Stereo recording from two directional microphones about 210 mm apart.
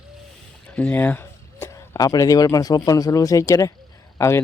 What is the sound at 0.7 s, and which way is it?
Speech, 5° left (ahead or behind).